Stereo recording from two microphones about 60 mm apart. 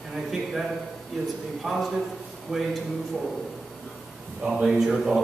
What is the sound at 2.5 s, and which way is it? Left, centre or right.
Speech, centre.